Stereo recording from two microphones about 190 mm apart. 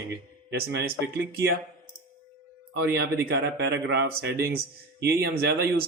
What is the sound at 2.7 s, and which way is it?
A man's voice, 60° right (ahead or behind).